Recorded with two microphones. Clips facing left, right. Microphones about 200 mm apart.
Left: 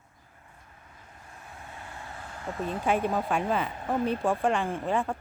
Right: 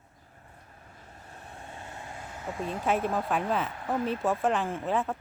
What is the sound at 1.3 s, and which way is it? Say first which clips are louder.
Vehicle: right 1 dB; 30° right (ahead or behind).